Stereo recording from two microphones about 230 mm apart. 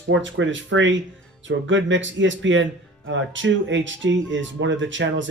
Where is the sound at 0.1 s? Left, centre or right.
Right.